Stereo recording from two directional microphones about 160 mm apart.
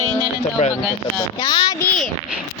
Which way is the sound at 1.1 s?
25° left (ahead or behind).